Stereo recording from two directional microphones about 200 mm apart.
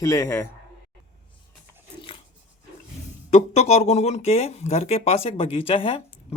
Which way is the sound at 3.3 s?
35° left (ahead or behind).